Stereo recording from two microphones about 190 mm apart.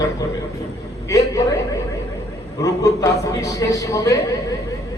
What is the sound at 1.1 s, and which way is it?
Speech, 15° left (ahead or behind).